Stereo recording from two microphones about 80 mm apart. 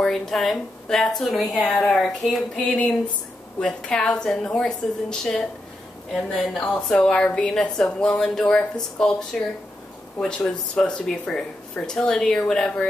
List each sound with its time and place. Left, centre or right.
0.0 s speech: centre
2.6 s speech: centre
6.5 s speech: centre